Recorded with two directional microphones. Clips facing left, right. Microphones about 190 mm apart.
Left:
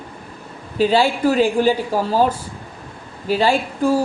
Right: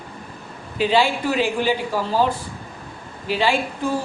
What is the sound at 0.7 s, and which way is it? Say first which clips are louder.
Speech: left 3 dB; 40° left (ahead or behind).